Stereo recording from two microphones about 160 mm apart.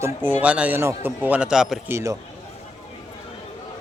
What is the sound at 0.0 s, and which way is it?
A man's voice, 15° right (ahead or behind).